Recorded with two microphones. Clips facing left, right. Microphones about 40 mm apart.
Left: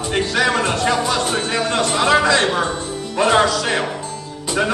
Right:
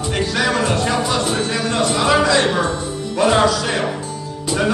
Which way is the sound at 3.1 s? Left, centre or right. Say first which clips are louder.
Left 1 dB; centre.